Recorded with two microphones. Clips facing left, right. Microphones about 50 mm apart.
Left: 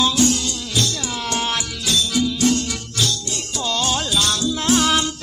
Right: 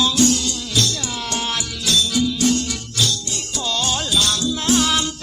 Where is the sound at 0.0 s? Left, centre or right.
Left.